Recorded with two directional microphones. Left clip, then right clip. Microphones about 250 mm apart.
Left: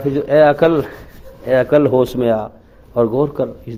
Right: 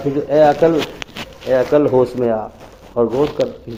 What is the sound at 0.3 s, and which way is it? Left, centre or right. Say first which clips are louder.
Speech: left 1 dB; left.